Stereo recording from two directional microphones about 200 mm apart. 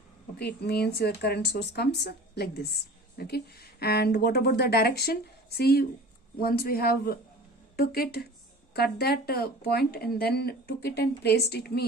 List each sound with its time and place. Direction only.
0.6 s speech: 55° left (ahead or behind)